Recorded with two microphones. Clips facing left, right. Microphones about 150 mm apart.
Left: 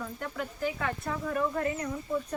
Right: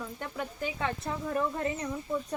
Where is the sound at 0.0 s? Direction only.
20° right (ahead or behind).